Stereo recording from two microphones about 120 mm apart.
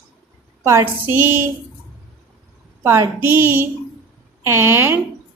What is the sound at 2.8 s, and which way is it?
A woman's voice, 20° right (ahead or behind).